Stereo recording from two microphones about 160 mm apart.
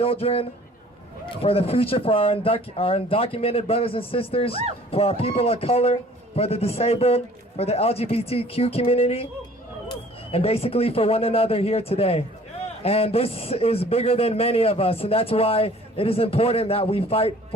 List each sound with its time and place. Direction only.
0.0 s a man's voice: 35° left (ahead or behind)